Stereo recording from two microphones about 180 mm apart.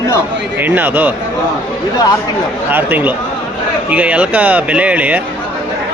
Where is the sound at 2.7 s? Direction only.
10° right (ahead or behind).